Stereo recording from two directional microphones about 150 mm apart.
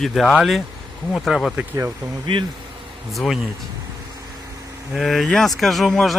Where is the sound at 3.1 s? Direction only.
Centre (ahead or behind).